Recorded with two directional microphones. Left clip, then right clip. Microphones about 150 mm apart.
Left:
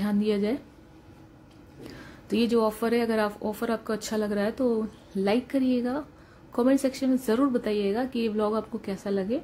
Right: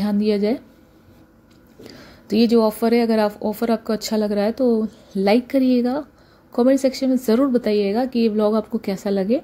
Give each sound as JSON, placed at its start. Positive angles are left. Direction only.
{"t": 0.0, "sound": "speech", "side_deg": -25}
{"t": 1.9, "sound": "speech", "side_deg": -20}